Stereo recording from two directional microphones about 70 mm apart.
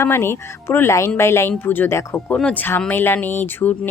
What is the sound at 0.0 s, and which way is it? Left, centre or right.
Speech, left.